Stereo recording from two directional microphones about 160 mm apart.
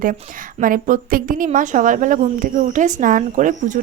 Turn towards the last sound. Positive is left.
turn(degrees=-55)  # may be behind; listen again after turning